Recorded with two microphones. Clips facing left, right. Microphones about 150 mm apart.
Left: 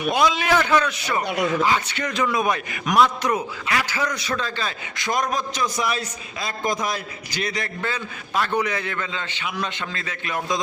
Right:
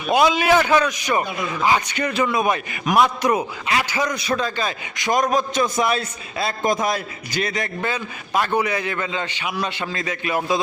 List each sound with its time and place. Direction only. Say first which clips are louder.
0.3 s a man's voice: right 3 dB; 10° right (ahead or behind)
1.2 s speech: left 4 dB; 70° left (ahead or behind)
1.6 s a man's voice: right 3 dB; 15° right (ahead or behind)
5.1 s a man's voice: right 6 dB; 45° right (ahead or behind)
7.6 s a man's voice: right 3 dB; 15° right (ahead or behind)